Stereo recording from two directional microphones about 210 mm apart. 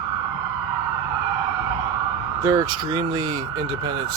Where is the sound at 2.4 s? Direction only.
15° right (ahead or behind).